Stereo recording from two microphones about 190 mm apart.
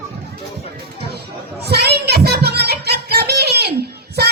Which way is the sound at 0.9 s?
60° right (ahead or behind).